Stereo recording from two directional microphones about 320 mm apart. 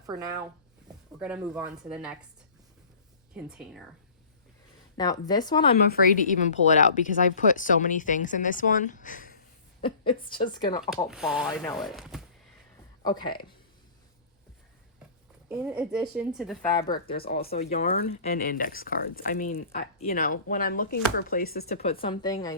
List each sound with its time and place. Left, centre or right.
0.0 s a woman's voice: centre
3.3 s a woman's voice: centre
4.9 s speech: centre
5.9 s a woman's voice: left
10.8 s a woman's voice: centre
13.1 s speech: centre
15.4 s a woman's voice: centre
16.8 s speech: left
21.8 s speech: centre